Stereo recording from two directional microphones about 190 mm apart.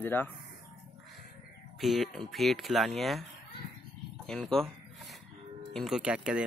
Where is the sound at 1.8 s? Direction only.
Centre (ahead or behind).